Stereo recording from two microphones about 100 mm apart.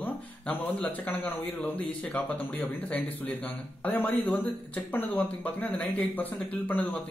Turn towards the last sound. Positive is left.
turn(degrees=15)  # may be behind; listen again after turning